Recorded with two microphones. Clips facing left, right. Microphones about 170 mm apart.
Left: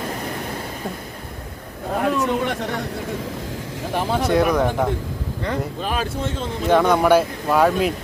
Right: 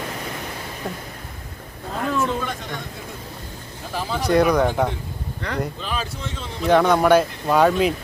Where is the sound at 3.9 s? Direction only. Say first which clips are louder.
Left 4 dB; 60° left (ahead or behind).